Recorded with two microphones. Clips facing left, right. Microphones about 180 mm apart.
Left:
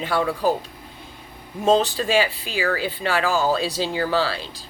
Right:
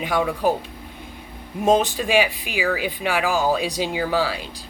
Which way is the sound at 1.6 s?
15° right (ahead or behind).